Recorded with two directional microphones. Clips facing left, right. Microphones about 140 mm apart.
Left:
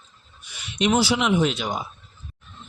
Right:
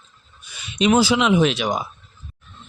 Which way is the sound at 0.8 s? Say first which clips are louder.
Right 4 dB; 90° right.